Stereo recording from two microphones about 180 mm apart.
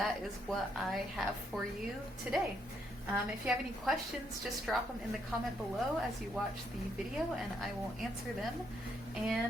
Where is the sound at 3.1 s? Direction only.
5° right (ahead or behind).